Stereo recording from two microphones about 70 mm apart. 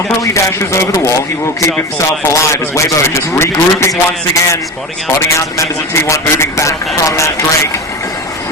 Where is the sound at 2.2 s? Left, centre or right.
Left.